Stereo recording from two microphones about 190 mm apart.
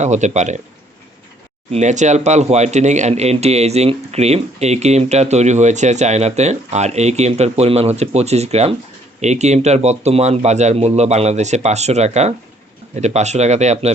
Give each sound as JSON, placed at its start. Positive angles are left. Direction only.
{"t": 0.0, "sound": "speech", "side_deg": -35}
{"t": 1.7, "sound": "speech", "side_deg": -40}